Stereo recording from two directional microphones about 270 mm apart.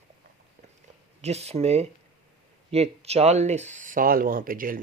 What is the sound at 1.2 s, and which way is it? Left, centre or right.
Speech, right.